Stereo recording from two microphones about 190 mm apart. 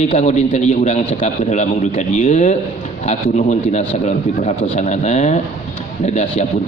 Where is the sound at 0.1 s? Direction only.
35° left (ahead or behind).